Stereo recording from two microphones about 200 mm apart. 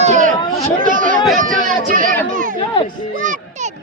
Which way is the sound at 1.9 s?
45° right (ahead or behind).